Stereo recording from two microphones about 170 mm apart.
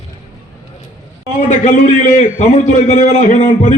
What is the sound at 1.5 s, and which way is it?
A man's voice, 45° left (ahead or behind).